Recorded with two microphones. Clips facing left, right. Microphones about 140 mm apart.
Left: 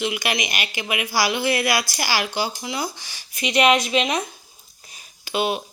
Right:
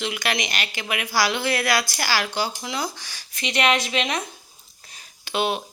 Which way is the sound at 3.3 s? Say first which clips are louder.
Left 4 dB; 15° left (ahead or behind).